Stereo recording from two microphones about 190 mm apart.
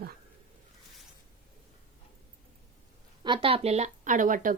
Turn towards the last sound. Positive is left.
turn(degrees=-45)  # may be behind; listen again after turning